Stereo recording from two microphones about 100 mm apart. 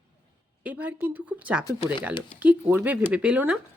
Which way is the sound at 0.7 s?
15° right (ahead or behind).